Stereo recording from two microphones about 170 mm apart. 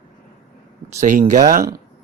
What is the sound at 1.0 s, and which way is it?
Speech, 50° right (ahead or behind).